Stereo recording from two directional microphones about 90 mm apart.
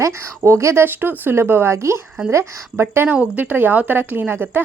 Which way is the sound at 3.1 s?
15° right (ahead or behind).